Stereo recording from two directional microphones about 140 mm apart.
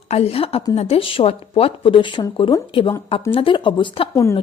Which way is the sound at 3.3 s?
40° left (ahead or behind).